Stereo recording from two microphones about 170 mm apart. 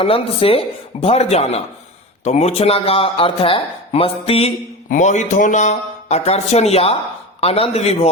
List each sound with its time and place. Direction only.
0.0 s speech: 35° left (ahead or behind)
4.9 s speech: 45° left (ahead or behind)